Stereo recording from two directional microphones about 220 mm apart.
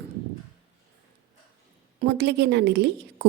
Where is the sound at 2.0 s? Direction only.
50° right (ahead or behind).